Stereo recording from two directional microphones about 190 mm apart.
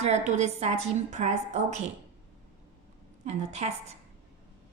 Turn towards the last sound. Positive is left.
turn(degrees=-35)  # may be behind; listen again after turning